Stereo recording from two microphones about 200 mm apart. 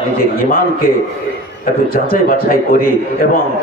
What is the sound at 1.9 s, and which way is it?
Speech, 45° left (ahead or behind).